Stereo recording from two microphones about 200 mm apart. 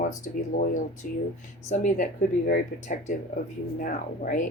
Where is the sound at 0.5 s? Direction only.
40° left (ahead or behind).